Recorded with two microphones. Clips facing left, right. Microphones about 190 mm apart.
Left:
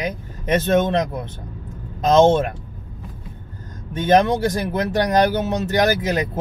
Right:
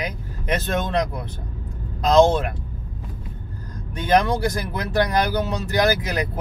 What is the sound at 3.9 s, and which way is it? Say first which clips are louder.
Speech: left 3 dB; 20° left (ahead or behind).